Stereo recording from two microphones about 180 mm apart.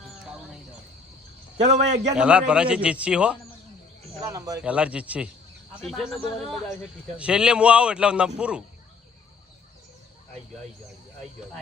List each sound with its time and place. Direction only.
1.5 s a man's voice: 40° right (ahead or behind)
2.1 s a man's voice: 5° right (ahead or behind)
4.3 s a man's voice: 20° right (ahead or behind)
4.6 s a man's voice: 5° right (ahead or behind)
7.2 s a man's voice: 5° right (ahead or behind)